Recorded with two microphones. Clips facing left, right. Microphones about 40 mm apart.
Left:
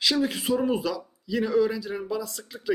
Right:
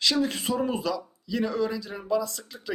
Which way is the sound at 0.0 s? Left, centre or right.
Centre.